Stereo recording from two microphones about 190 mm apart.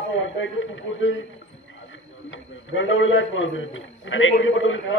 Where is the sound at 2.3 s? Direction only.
90° left.